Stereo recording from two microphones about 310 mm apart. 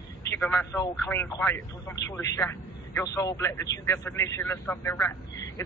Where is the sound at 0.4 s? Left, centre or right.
Centre.